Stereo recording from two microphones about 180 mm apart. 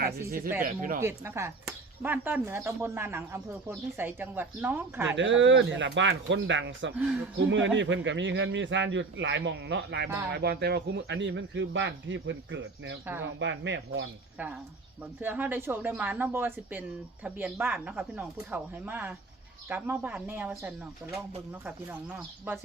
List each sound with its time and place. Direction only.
0.0 s speech: 55° right (ahead or behind)
1.0 s speech: 15° right (ahead or behind)
5.1 s a man's voice: 90° right
10.3 s a man's voice: 65° right (ahead or behind); by 14.0 s 90° right
14.3 s speech: 10° right (ahead or behind)